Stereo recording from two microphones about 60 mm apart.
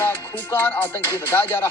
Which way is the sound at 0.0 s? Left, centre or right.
Left.